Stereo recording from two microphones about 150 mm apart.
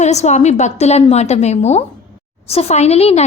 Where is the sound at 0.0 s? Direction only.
50° left (ahead or behind).